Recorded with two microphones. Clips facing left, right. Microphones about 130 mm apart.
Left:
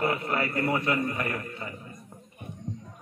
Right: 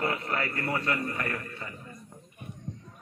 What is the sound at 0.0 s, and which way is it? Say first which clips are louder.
A man's voice: left 3 dB; 10° left (ahead or behind).